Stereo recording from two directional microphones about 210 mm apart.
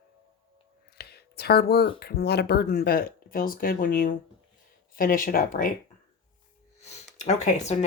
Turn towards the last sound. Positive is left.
turn(degrees=35)  # may be behind; listen again after turning